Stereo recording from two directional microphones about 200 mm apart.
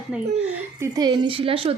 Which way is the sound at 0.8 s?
20° right (ahead or behind).